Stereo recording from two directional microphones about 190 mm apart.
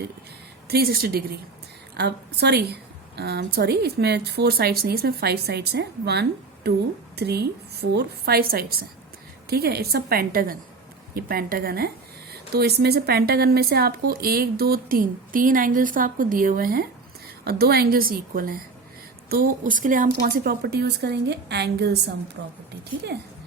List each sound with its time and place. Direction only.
0.7 s speech: 55° right (ahead or behind)
22.4 s speech: 70° right (ahead or behind)